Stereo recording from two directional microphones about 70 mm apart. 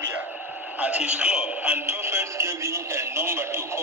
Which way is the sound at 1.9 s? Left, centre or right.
Right.